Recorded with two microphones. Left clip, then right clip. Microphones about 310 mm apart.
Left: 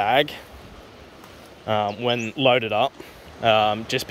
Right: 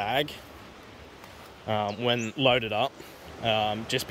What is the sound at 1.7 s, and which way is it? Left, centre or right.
Speech, centre.